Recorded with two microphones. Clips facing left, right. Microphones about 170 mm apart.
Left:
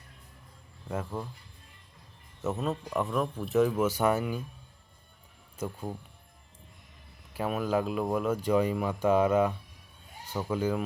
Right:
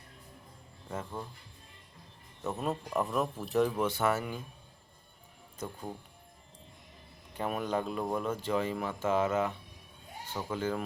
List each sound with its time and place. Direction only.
0.9 s speech: 10° left (ahead or behind)
2.6 s speech: 5° right (ahead or behind)
5.5 s speech: 10° left (ahead or behind)
7.3 s speech: 5° left (ahead or behind)